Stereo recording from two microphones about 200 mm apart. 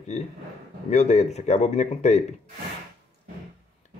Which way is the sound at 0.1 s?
35° left (ahead or behind).